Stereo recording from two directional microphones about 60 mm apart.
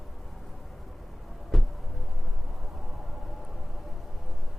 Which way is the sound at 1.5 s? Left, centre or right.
Centre.